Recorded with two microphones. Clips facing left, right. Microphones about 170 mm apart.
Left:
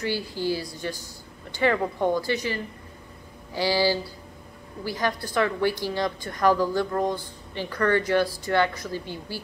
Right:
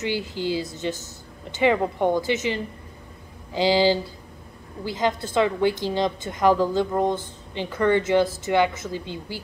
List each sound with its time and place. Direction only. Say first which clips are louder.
0.0 s a woman's voice: right 1 dB; 20° right (ahead or behind)